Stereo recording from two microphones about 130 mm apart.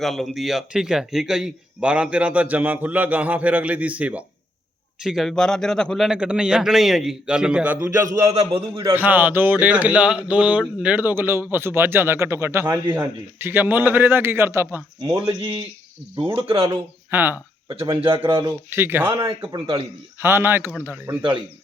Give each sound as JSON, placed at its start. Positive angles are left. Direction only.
{"t": 0.0, "sound": "a man's voice", "side_deg": 0}
{"t": 6.1, "sound": "a man's voice", "side_deg": -5}
{"t": 7.9, "sound": "a man's voice", "side_deg": -25}
{"t": 15.0, "sound": "speech", "side_deg": -35}
{"t": 17.1, "sound": "a man's voice", "side_deg": -15}
{"t": 17.9, "sound": "speech", "side_deg": -40}
{"t": 18.4, "sound": "a man's voice", "side_deg": -20}
{"t": 19.4, "sound": "speech", "side_deg": -40}
{"t": 20.1, "sound": "a man's voice", "side_deg": -20}
{"t": 21.2, "sound": "speech", "side_deg": -40}